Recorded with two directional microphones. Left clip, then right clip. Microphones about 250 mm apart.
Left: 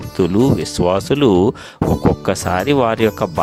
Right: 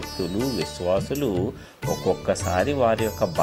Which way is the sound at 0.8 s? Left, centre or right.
Left.